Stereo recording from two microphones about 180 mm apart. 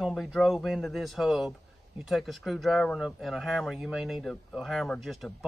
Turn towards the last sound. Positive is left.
turn(degrees=0)  # may be behind; listen again after turning